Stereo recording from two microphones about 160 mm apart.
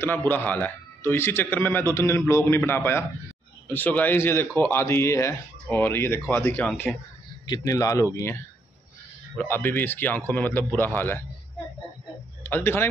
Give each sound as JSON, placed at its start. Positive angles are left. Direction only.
{"t": 0.0, "sound": "a man's voice", "side_deg": 15}
{"t": 7.4, "sound": "a man's voice", "side_deg": 25}
{"t": 12.4, "sound": "speech", "side_deg": 15}